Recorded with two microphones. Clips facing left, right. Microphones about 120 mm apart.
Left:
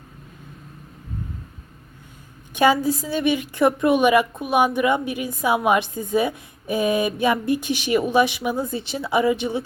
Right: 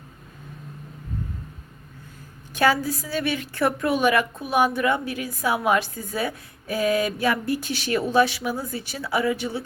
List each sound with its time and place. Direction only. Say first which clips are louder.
2.5 s a woman's voice: left 3 dB; 20° left (ahead or behind)